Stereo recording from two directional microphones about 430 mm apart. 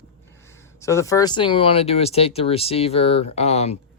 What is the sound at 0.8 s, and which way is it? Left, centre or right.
Speech, centre.